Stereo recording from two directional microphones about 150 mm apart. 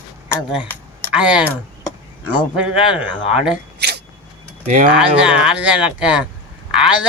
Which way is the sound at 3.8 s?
90° right.